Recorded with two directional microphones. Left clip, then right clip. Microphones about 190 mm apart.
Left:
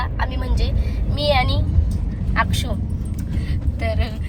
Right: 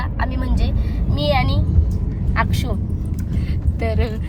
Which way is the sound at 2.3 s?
30° right (ahead or behind).